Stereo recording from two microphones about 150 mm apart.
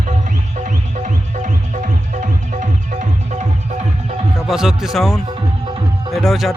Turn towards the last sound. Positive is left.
turn(degrees=0)  # may be behind; listen again after turning